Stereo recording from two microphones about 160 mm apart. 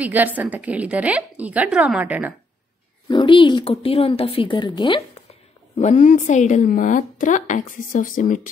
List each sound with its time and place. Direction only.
0.0 s a woman's voice: 10° right (ahead or behind)
3.1 s speech: 30° left (ahead or behind)
5.8 s a woman's voice: 50° left (ahead or behind)